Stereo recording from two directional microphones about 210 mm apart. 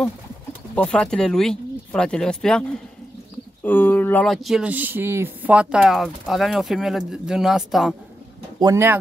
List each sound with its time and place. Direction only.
0.0 s speech: 5° left (ahead or behind)
3.6 s speech: 10° left (ahead or behind)
8.5 s speech: 15° right (ahead or behind)